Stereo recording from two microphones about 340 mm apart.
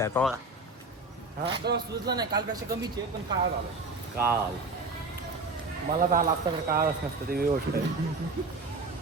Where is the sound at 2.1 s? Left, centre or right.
Centre.